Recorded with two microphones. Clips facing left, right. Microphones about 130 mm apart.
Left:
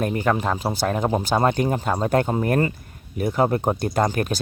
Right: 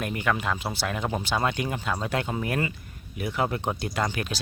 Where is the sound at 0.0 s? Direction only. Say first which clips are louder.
Left 6 dB; 35° left (ahead or behind).